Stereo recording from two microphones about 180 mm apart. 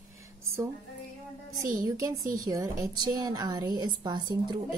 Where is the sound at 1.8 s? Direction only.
20° right (ahead or behind).